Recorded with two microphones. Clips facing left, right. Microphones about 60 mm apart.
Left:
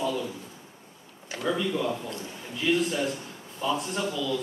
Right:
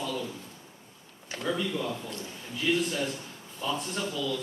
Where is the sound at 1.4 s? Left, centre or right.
Centre.